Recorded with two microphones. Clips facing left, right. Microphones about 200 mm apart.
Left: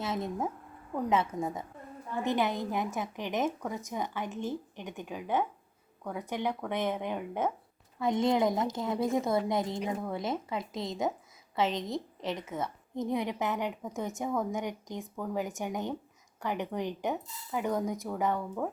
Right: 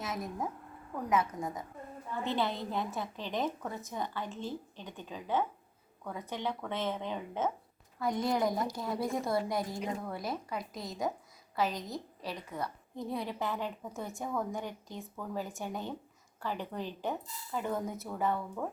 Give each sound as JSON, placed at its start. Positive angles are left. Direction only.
{"t": 0.0, "sound": "a woman's voice", "side_deg": 25}
{"t": 2.2, "sound": "a woman's voice", "side_deg": 15}